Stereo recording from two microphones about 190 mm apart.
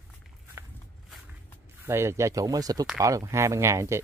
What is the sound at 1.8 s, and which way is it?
Speech, 15° right (ahead or behind).